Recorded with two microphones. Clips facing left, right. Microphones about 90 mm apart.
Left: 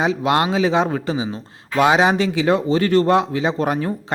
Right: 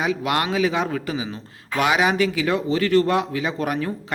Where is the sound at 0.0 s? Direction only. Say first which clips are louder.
Left 4 dB; 30° left (ahead or behind).